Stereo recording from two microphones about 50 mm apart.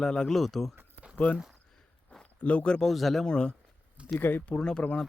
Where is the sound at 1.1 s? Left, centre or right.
Left.